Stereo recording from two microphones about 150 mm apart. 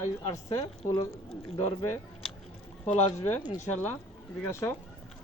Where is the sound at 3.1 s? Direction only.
15° left (ahead or behind).